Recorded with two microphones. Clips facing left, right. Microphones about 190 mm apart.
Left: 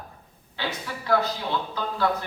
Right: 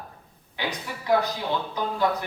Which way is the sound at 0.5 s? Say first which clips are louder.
Even; 15° right (ahead or behind).